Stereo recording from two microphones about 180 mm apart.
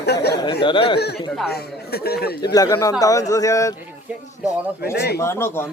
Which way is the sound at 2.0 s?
60° left (ahead or behind).